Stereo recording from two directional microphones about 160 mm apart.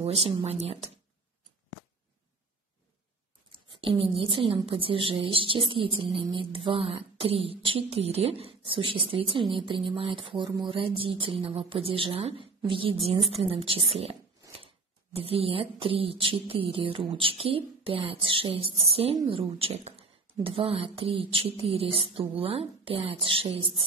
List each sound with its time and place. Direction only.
0.0 s speech: 40° right (ahead or behind)
3.7 s speech: 35° right (ahead or behind)
15.1 s speech: 35° right (ahead or behind)